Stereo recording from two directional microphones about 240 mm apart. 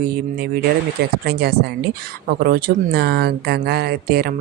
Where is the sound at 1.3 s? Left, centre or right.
Right.